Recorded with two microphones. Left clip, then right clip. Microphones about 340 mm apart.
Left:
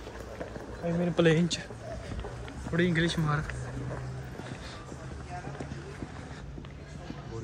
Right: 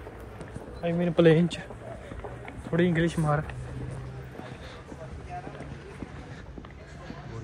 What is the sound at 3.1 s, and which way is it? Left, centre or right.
Speech, centre.